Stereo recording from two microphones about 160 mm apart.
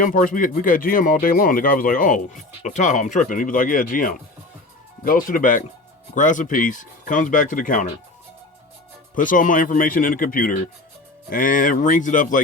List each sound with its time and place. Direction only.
0.0 s speech: 55° left (ahead or behind)
9.1 s speech: 55° left (ahead or behind)